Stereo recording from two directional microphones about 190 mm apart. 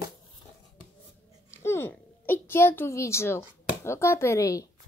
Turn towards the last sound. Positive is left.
turn(degrees=15)  # may be behind; listen again after turning